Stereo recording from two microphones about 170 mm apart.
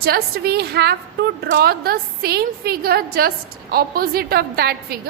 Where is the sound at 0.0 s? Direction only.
65° right (ahead or behind).